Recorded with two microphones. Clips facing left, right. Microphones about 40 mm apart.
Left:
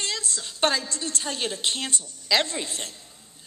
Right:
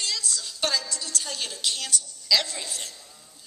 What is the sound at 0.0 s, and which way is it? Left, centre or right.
A woman's voice, left.